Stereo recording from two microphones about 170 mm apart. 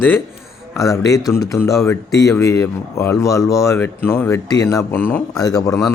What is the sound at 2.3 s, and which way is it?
A man's voice, 15° left (ahead or behind).